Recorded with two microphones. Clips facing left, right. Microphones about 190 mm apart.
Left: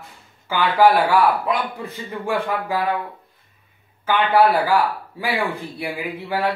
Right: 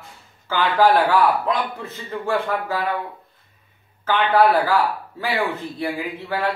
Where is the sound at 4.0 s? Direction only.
10° left (ahead or behind).